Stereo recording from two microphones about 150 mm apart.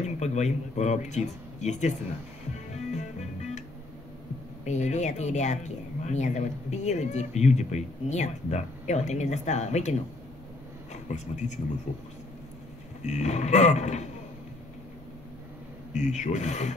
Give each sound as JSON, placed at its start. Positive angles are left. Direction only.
{"t": 0.0, "sound": "speech", "side_deg": 50}
{"t": 2.7, "sound": "music", "side_deg": 50}
{"t": 4.6, "sound": "speech", "side_deg": 50}
{"t": 13.0, "sound": "speech", "side_deg": 50}
{"t": 15.9, "sound": "speech", "side_deg": 50}